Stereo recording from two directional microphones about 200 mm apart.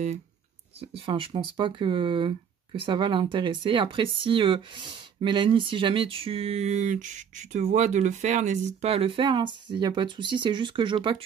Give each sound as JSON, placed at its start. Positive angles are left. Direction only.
{"t": 0.7, "sound": "speech", "side_deg": -25}